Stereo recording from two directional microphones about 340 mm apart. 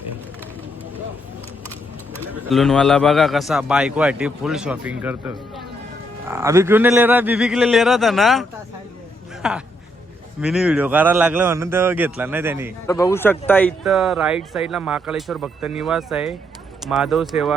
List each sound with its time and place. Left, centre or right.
2.1 s a man's voice: centre
12.9 s a man's voice: centre